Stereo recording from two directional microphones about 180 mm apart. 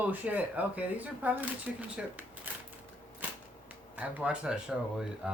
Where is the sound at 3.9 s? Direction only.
10° right (ahead or behind).